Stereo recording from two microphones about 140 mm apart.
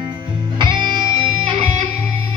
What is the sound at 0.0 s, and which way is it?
Music, 35° right (ahead or behind).